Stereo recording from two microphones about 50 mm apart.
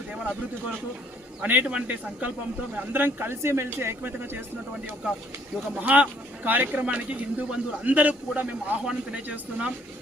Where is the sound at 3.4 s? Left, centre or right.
Right.